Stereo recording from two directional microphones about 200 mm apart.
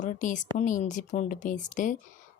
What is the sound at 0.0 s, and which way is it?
Speech, 40° left (ahead or behind).